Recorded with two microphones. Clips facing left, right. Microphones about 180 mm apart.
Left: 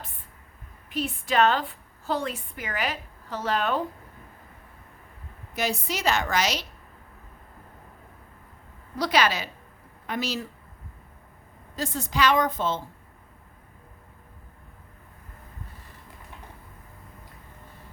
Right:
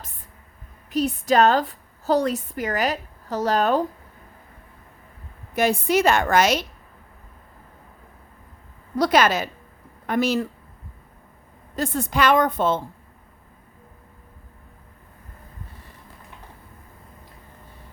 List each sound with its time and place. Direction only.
0.9 s a woman's voice: 40° right (ahead or behind)
5.5 s a woman's voice: 55° right (ahead or behind)
9.0 s a woman's voice: 50° right (ahead or behind)
11.8 s a woman's voice: 55° right (ahead or behind)